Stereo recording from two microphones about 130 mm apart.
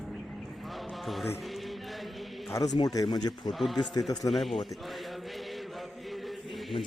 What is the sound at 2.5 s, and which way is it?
Speech, 25° left (ahead or behind).